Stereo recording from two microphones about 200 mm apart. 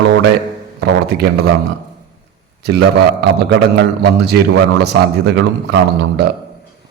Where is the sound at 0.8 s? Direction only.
55° right (ahead or behind).